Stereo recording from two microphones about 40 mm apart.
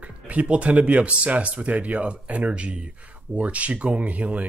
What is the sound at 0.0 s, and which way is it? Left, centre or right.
Speech, right.